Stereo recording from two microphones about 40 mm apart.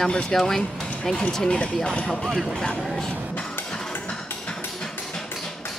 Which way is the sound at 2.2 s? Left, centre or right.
Centre.